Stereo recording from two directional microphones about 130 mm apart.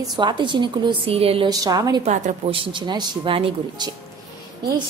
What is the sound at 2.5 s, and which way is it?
A woman's voice, 35° right (ahead or behind).